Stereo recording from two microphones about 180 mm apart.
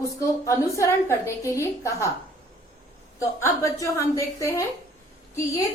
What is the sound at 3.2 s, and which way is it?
A woman's voice, 15° left (ahead or behind).